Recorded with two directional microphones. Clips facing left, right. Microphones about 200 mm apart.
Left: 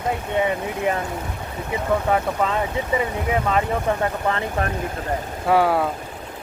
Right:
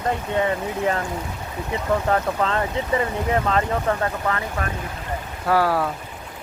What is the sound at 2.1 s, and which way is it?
Speech, 10° left (ahead or behind).